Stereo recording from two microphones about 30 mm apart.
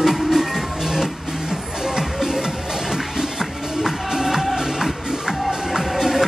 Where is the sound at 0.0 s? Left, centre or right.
Centre.